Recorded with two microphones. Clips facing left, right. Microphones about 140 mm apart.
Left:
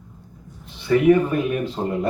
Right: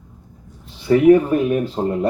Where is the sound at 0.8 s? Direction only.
35° right (ahead or behind).